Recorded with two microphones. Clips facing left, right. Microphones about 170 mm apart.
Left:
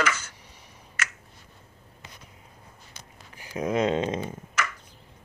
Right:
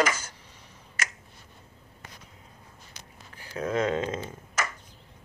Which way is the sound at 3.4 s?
15° left (ahead or behind).